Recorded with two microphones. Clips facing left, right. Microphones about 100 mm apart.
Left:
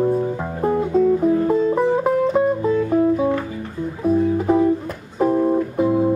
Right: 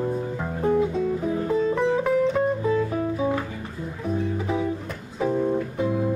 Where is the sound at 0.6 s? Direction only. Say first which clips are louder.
Left 1 dB; 5° left (ahead or behind).